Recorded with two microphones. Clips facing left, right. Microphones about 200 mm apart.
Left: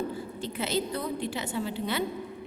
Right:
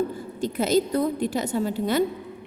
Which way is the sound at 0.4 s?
45° right (ahead or behind).